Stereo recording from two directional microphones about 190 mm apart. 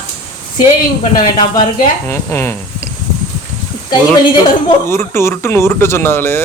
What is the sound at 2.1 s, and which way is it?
Speech, 15° left (ahead or behind).